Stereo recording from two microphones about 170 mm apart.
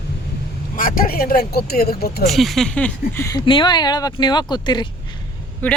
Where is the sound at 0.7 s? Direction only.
55° left (ahead or behind).